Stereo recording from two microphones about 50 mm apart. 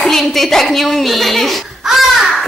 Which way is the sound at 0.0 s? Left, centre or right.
Centre.